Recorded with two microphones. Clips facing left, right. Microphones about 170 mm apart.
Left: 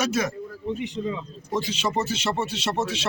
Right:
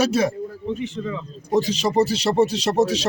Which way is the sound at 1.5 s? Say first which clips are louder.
Right 7 dB; 40° right (ahead or behind).